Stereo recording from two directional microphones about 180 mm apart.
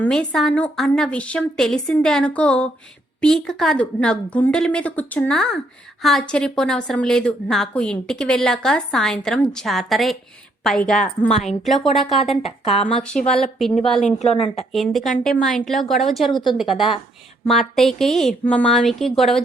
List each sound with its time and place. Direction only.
0.0 s a woman's voice: 5° left (ahead or behind)
12.4 s a woman's voice: 35° left (ahead or behind)
12.9 s a woman's voice: 5° left (ahead or behind)
14.2 s a woman's voice: 30° left (ahead or behind)
14.7 s a woman's voice: centre (ahead or behind)